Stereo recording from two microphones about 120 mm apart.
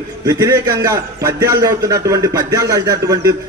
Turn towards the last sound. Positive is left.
turn(degrees=-30)  # may be behind; listen again after turning